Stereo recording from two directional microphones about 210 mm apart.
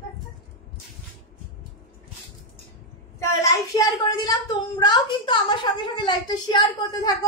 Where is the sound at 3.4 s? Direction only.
15° left (ahead or behind).